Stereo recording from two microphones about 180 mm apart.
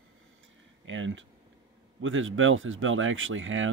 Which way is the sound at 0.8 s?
90° right.